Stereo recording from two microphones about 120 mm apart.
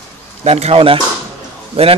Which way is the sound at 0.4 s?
60° right (ahead or behind).